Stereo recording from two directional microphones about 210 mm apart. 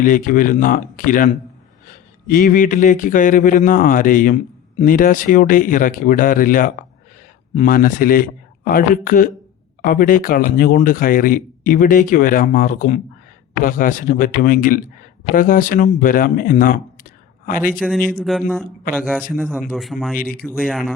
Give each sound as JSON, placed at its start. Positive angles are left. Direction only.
{"t": 0.0, "sound": "speech", "side_deg": 40}
{"t": 17.7, "sound": "speech", "side_deg": 0}